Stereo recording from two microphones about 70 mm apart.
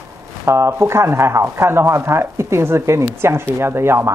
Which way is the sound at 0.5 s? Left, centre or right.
Right.